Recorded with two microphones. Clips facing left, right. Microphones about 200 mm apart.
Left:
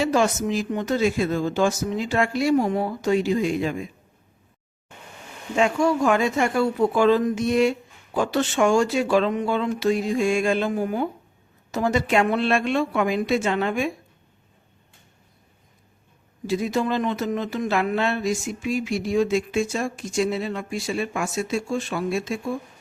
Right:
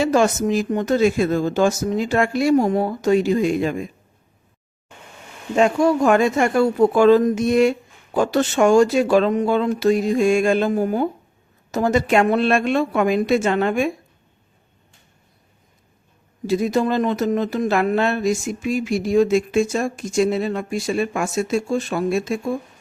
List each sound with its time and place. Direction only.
0.0 s speech: 45° right (ahead or behind)
5.5 s speech: 40° right (ahead or behind)
16.5 s speech: 45° right (ahead or behind)